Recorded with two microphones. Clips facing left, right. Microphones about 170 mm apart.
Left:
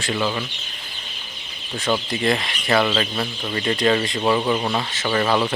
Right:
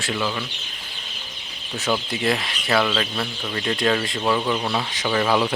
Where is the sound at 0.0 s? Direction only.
Centre (ahead or behind).